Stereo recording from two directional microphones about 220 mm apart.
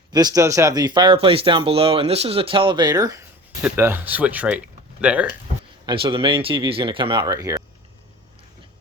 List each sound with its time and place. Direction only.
0.1 s speech: 15° right (ahead or behind)
5.8 s speech: 20° right (ahead or behind)